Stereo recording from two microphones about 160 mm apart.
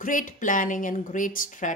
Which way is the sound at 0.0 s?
55° left (ahead or behind).